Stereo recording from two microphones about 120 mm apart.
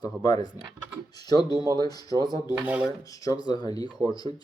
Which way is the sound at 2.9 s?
30° left (ahead or behind).